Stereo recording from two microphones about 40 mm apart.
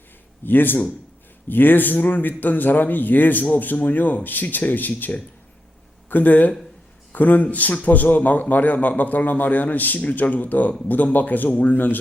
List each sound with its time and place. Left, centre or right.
0.4 s a man's voice: left